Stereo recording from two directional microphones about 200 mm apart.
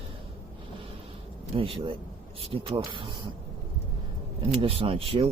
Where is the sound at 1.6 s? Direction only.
25° right (ahead or behind).